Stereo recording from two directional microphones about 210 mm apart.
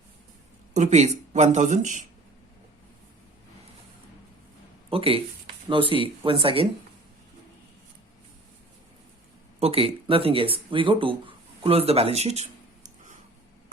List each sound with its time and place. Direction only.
0.7 s speech: 35° right (ahead or behind)
4.9 s speech: 25° right (ahead or behind)
9.6 s speech: 25° right (ahead or behind)
11.6 s a sound: 25° right (ahead or behind)